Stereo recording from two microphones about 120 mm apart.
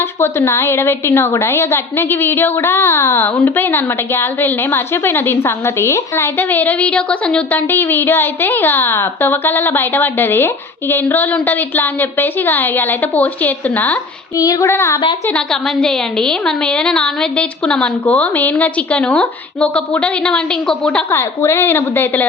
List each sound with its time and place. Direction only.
0.2 s a woman's voice: 20° left (ahead or behind)
14.3 s child singing: 30° left (ahead or behind)
15.3 s a woman's voice: 5° left (ahead or behind)
21.2 s a woman's voice: 20° left (ahead or behind)